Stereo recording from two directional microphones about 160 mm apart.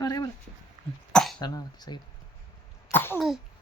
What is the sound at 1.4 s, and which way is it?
Speech, 25° left (ahead or behind).